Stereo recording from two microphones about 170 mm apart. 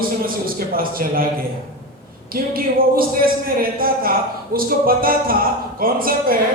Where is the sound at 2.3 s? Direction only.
60° right (ahead or behind).